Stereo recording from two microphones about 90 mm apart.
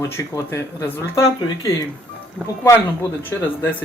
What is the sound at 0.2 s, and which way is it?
Speech, 30° left (ahead or behind).